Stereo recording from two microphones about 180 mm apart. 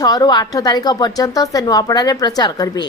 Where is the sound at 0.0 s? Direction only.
20° left (ahead or behind).